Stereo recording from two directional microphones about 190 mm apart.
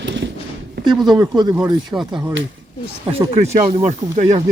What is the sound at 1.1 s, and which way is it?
Speech, 20° right (ahead or behind).